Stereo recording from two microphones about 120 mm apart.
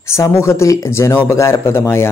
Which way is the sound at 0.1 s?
25° left (ahead or behind).